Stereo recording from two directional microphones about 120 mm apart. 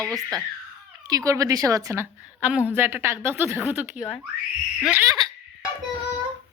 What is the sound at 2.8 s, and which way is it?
Speech, 20° right (ahead or behind).